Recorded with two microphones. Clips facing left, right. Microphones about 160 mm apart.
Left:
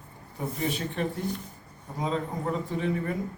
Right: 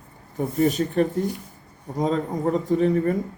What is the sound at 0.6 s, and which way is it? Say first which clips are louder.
A man's voice: right 11 dB; 40° right (ahead or behind).